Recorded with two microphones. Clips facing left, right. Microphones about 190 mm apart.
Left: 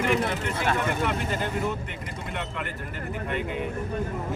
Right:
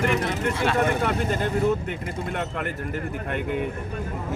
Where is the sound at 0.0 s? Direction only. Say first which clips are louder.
Right 1 dB; 55° right (ahead or behind).